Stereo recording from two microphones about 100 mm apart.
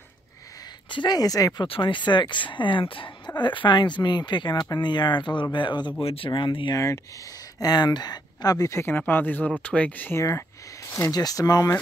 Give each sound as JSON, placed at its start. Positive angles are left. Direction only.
{"t": 0.8, "sound": "speech", "side_deg": 50}
{"t": 1.7, "sound": "speech", "side_deg": 55}
{"t": 6.7, "sound": "speech", "side_deg": 30}
{"t": 7.6, "sound": "speech", "side_deg": 45}
{"t": 10.1, "sound": "speech", "side_deg": 30}